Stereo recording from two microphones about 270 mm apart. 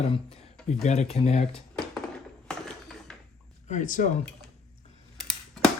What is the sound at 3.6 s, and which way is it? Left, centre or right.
Speech, left.